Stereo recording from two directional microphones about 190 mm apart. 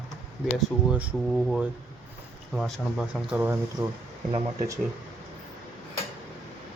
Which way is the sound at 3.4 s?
10° right (ahead or behind).